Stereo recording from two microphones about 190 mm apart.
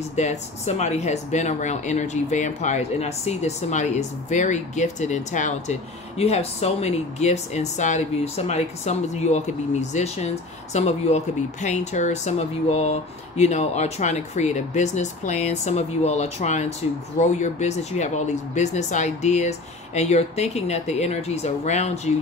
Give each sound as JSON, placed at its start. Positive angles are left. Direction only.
{"t": 0.1, "sound": "speech", "side_deg": 35}